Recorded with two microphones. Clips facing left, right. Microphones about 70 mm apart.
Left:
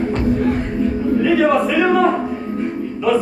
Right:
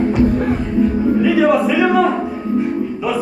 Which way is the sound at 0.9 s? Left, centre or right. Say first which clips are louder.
Right 2 dB; right.